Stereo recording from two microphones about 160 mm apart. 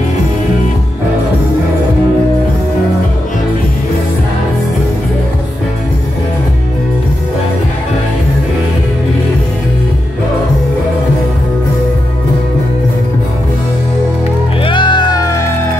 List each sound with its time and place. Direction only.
14.6 s music: 30° left (ahead or behind)